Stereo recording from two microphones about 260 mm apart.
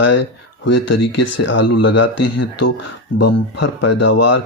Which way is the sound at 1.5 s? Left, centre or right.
Left.